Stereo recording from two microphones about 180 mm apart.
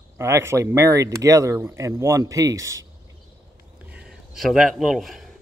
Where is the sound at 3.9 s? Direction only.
5° right (ahead or behind).